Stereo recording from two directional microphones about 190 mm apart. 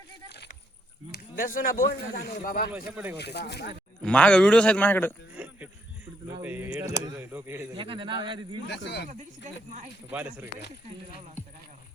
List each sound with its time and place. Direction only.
0.3 s a sound: 60° left (ahead or behind)
1.1 s speech: 45° left (ahead or behind)
2.7 s speech: 10° right (ahead or behind)
3.2 s speech: 60° left (ahead or behind)
4.0 s a man's voice: 5° left (ahead or behind)
5.3 s music: 5° right (ahead or behind)
6.4 s speech: 10° right (ahead or behind)
7.8 s a man's voice: 25° right (ahead or behind)
8.6 s speech: 65° left (ahead or behind)
9.0 s speech: 35° right (ahead or behind)
10.1 s speech: 5° right (ahead or behind)